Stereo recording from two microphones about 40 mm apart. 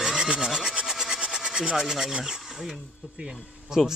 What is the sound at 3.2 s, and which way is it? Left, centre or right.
Speech, right.